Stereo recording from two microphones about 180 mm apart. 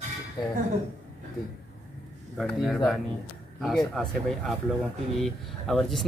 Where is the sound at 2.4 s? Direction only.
Centre (ahead or behind).